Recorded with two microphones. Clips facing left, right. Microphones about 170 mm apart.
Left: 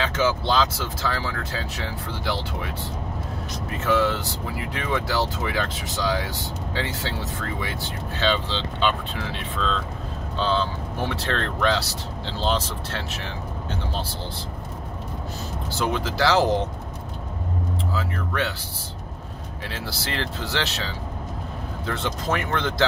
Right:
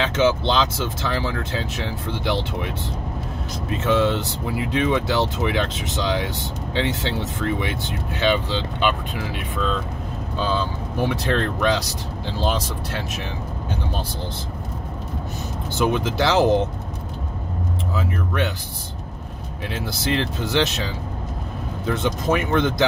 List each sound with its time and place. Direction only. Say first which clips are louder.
0.0 s speech: right 4 dB; 20° right (ahead or behind)
3.7 s speech: right 3 dB; 20° right (ahead or behind)
15.7 s speech: right 5 dB; 20° right (ahead or behind)
17.9 s speech: right 4 dB; 20° right (ahead or behind)
19.7 s speech: right 8 dB; 20° right (ahead or behind)